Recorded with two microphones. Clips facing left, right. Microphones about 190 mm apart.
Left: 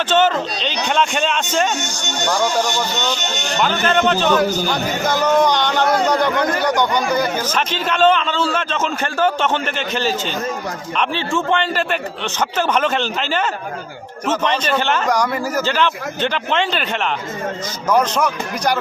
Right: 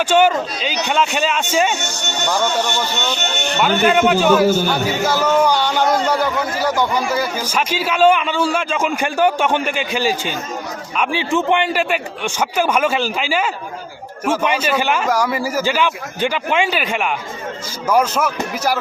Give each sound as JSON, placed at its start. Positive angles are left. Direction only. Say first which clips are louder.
{"t": 0.1, "sound": "a man's voice", "louder": "right 1 dB", "side_deg": -10}
{"t": 2.4, "sound": "speech", "louder": "left 2 dB", "side_deg": 10}
{"t": 3.2, "sound": "speech", "louder": "right 2 dB", "side_deg": -60}
{"t": 3.8, "sound": "a man's voice", "louder": "right 3 dB", "side_deg": -10}